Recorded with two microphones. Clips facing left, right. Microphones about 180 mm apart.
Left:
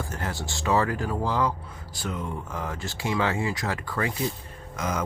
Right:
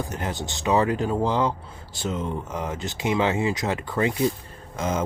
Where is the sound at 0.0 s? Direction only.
20° right (ahead or behind).